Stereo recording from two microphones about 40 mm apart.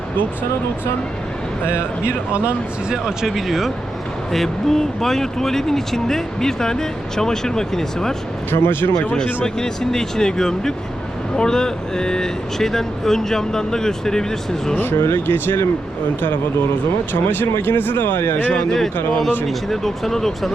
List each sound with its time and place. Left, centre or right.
1.6 s speech: left
2.9 s speech: centre
4.3 s speech: centre
8.4 s speech: left
9.1 s speech: centre
14.8 s speech: left
17.2 s speech: left
18.5 s speech: centre